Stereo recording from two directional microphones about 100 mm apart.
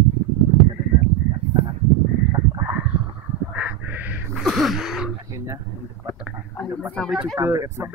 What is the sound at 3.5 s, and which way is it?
Crow, 15° right (ahead or behind).